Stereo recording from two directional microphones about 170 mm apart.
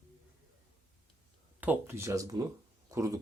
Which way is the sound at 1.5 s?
10° right (ahead or behind).